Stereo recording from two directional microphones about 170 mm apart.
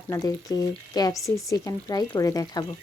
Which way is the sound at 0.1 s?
20° left (ahead or behind).